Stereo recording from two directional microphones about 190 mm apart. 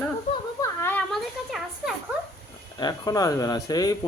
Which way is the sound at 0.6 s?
15° left (ahead or behind).